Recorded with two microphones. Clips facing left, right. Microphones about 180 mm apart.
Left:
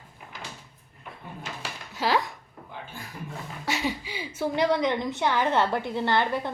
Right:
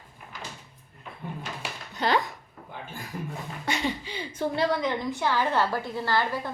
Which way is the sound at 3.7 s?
5° left (ahead or behind).